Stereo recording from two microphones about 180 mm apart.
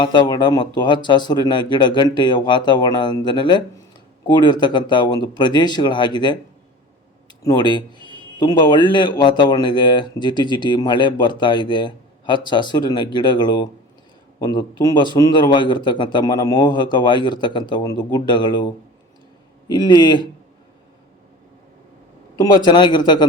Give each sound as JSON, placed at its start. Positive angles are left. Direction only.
{"t": 0.0, "sound": "speech", "side_deg": 25}
{"t": 7.4, "sound": "speech", "side_deg": 25}
{"t": 22.4, "sound": "speech", "side_deg": 25}